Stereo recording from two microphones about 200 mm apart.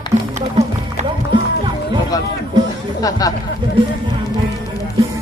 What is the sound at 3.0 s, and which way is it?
Speech, 20° left (ahead or behind).